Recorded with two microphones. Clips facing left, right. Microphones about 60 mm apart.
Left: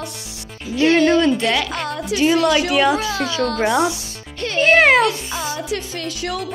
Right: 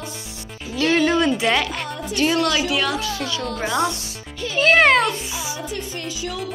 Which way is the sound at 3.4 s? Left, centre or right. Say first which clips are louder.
Left 7 dB; left.